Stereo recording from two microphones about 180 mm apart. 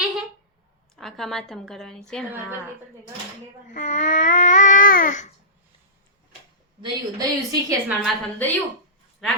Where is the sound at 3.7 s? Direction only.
45° left (ahead or behind).